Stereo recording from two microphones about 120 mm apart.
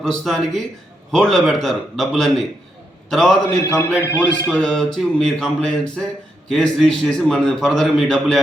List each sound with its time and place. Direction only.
0.0 s a man's voice: 5° left (ahead or behind)